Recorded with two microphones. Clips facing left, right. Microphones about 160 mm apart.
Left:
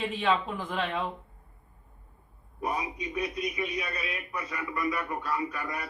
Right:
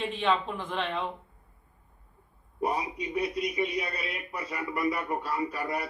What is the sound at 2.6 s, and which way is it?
A man's voice, 30° right (ahead or behind).